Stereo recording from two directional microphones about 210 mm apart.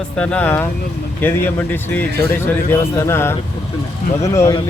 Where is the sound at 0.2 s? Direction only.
5° left (ahead or behind).